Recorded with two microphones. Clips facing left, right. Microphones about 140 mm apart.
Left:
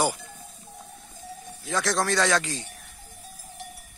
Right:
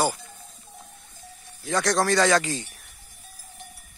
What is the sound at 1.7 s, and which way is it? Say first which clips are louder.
Speech: right 3 dB; centre (ahead or behind).